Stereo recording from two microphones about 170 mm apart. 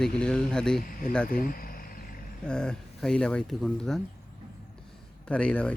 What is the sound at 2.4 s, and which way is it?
Speech, 5° left (ahead or behind).